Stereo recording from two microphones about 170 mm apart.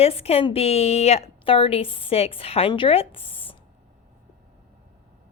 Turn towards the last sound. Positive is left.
turn(degrees=35)  # may be behind; listen again after turning